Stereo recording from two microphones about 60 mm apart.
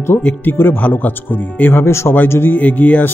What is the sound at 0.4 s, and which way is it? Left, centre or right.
Speech, left.